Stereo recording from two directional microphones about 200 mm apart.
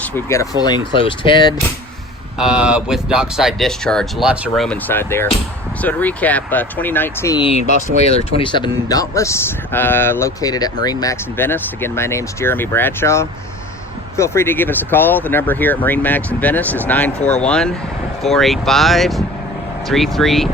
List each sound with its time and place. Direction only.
0.0 s speech: 10° left (ahead or behind)
2.4 s speech: 5° right (ahead or behind)
7.3 s speech: 30° left (ahead or behind); by 20.5 s centre (ahead or behind)